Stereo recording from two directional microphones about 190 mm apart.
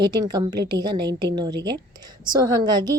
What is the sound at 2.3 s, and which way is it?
Speech, 20° right (ahead or behind).